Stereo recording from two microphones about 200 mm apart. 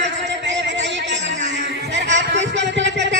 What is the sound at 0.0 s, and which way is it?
Music, 60° right (ahead or behind).